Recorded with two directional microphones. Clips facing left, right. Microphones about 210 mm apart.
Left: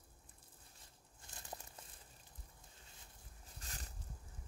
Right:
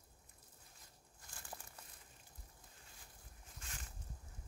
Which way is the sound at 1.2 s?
25° left (ahead or behind).